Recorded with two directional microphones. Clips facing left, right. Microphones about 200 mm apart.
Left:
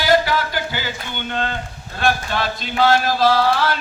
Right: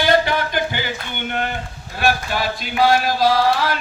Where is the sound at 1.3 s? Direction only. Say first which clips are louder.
Even; 15° right (ahead or behind).